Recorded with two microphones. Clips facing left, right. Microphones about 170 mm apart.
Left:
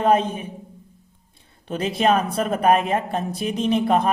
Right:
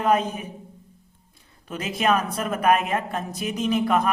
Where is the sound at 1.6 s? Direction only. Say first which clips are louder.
Left 4 dB; 30° left (ahead or behind).